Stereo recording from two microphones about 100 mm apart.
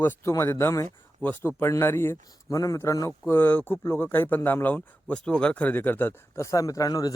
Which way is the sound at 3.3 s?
20° left (ahead or behind).